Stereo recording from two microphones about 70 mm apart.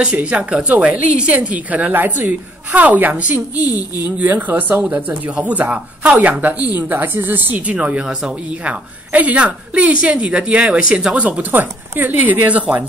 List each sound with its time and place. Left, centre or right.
0.0 s speech: centre